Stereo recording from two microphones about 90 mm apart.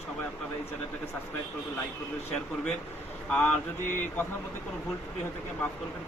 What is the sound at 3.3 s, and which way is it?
Speech, 15° left (ahead or behind).